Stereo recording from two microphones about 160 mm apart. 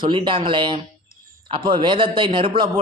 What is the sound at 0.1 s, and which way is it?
A man's voice, 30° right (ahead or behind).